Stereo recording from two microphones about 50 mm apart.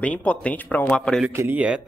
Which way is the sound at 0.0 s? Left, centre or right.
Left.